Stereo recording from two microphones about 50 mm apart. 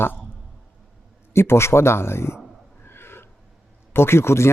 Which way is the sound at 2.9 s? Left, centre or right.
Left.